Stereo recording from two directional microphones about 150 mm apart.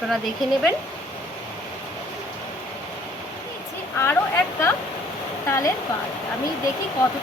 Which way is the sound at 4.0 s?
15° left (ahead or behind).